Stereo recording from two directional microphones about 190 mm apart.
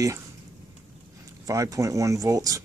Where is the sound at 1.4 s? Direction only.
15° right (ahead or behind).